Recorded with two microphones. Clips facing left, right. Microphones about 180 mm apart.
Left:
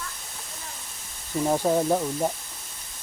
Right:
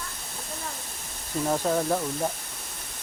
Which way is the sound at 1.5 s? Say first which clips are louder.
Left 3 dB; 15° left (ahead or behind).